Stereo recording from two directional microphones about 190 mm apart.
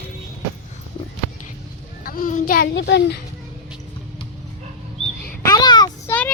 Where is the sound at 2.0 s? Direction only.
50° left (ahead or behind).